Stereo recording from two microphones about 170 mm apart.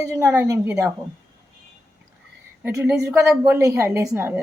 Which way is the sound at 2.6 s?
10° right (ahead or behind).